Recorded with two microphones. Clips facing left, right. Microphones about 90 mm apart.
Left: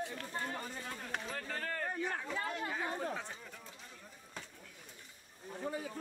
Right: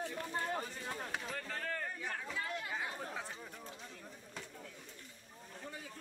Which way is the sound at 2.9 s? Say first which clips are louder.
Left 4 dB; centre (ahead or behind).